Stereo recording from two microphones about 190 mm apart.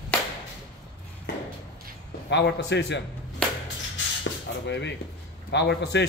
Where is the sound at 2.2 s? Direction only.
65° left (ahead or behind).